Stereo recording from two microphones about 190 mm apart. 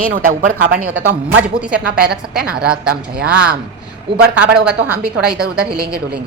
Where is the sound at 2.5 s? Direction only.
5° right (ahead or behind).